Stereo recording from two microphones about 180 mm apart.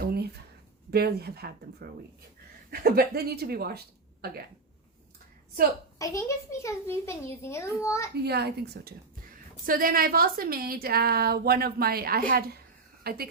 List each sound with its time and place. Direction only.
0.0 s a sound: 60° right (ahead or behind)
0.9 s a woman's voice: 60° right (ahead or behind)
6.0 s a child's voice: 15° left (ahead or behind)
8.2 s a woman's voice: 65° right (ahead or behind)